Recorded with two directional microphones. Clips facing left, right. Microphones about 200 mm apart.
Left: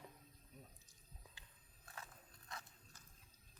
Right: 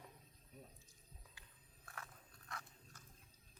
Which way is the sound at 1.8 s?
20° left (ahead or behind).